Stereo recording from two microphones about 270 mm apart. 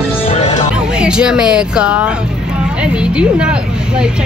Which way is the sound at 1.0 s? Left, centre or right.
Centre.